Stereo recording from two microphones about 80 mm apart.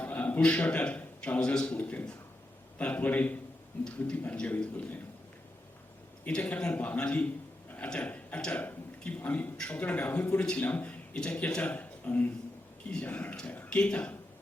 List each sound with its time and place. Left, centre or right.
0.0 s a man's voice: centre
6.2 s a man's voice: centre